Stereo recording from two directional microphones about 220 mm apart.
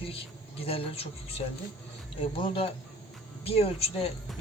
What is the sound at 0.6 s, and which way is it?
Speech, 25° left (ahead or behind).